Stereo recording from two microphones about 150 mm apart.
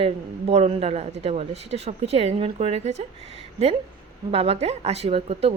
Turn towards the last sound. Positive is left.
turn(degrees=-40)  # may be behind; listen again after turning